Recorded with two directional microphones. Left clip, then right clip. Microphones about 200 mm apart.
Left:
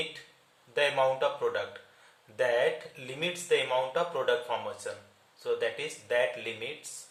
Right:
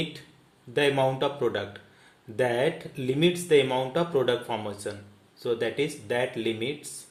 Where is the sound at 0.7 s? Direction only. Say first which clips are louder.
Right 2 dB; 30° right (ahead or behind).